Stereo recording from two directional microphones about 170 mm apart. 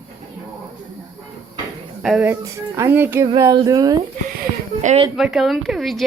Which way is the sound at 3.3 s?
25° right (ahead or behind).